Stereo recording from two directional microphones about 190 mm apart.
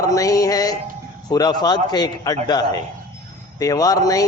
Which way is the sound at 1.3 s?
20° left (ahead or behind).